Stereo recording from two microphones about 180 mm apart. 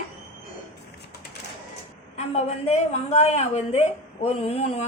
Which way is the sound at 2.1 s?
35° left (ahead or behind).